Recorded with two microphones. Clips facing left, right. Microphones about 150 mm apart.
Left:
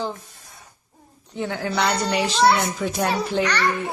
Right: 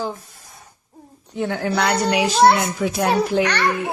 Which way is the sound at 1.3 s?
10° right (ahead or behind).